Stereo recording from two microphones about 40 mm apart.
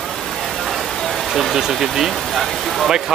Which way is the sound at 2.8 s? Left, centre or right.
Centre.